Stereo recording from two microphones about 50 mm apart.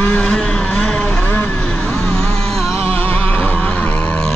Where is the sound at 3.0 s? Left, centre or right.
Left.